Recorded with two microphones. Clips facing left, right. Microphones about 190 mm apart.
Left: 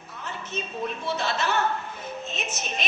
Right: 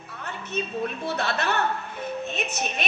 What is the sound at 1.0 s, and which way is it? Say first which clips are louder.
A woman's voice: left 1 dB; 60° right (ahead or behind).